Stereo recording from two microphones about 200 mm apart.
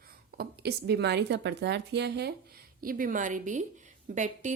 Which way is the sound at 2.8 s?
45° right (ahead or behind).